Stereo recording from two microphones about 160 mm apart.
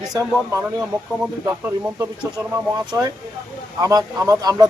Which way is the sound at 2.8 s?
25° right (ahead or behind).